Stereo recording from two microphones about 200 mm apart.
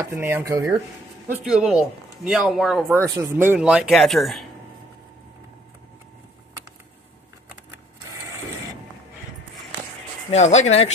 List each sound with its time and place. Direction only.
0.0 s dishes: 10° right (ahead or behind)
1.4 s speech: 5° right (ahead or behind)
2.9 s speech: 15° right (ahead or behind)
10.3 s speech: 35° left (ahead or behind)